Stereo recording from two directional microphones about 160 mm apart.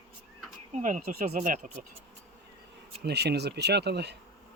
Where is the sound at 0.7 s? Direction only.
50° right (ahead or behind).